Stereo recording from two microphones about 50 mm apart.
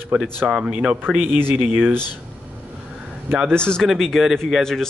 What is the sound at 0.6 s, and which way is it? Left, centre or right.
Speech, centre.